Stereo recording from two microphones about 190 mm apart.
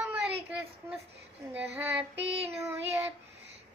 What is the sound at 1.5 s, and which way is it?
Child singing, 10° right (ahead or behind).